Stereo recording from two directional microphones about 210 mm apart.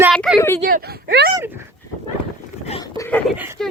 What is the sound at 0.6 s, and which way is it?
Speech, 45° right (ahead or behind).